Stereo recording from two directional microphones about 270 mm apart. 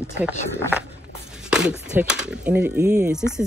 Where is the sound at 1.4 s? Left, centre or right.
Centre.